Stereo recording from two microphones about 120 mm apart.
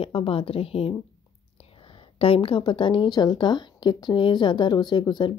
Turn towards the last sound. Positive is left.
turn(degrees=40)  # may be behind; listen again after turning